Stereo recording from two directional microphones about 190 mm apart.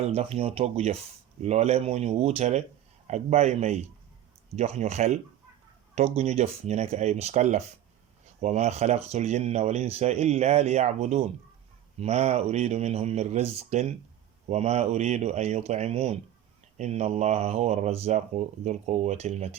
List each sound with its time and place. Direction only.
0.0 s speech: 35° right (ahead or behind)